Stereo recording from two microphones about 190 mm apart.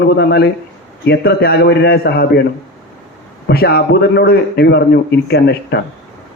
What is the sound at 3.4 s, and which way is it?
A man's voice, 55° left (ahead or behind).